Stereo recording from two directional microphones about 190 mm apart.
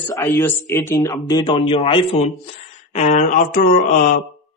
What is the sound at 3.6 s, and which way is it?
Mantra, 45° left (ahead or behind).